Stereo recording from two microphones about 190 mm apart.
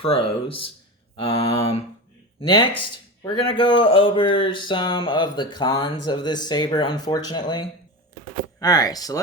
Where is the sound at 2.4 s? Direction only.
25° left (ahead or behind).